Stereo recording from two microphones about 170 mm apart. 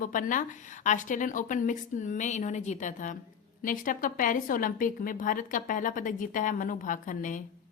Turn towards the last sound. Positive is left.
turn(degrees=50)  # may be behind; listen again after turning